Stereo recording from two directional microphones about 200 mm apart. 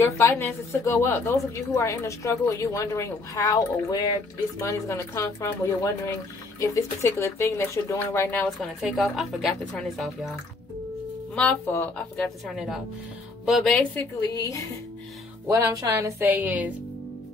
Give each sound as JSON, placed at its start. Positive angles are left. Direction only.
{"t": 0.0, "sound": "a woman's voice", "side_deg": 10}
{"t": 6.6, "sound": "a woman's voice", "side_deg": 15}
{"t": 11.3, "sound": "a woman's voice", "side_deg": 5}
{"t": 12.5, "sound": "speech", "side_deg": 0}
{"t": 14.3, "sound": "a woman's voice", "side_deg": 15}
{"t": 15.4, "sound": "speech", "side_deg": -15}